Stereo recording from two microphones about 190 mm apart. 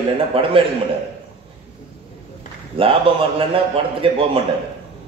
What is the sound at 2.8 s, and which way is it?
A man's voice, 30° right (ahead or behind).